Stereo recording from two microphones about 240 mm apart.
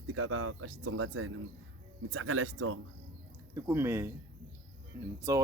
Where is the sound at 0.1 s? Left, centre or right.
Right.